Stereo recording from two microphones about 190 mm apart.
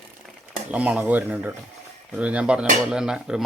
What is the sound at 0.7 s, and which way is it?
Speech, 5° right (ahead or behind).